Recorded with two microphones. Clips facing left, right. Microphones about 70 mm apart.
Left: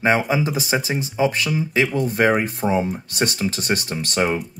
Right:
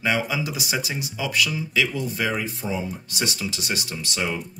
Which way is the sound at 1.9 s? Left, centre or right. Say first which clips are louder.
Left 8 dB; left.